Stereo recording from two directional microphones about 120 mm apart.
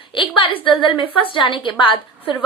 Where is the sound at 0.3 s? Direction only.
45° left (ahead or behind).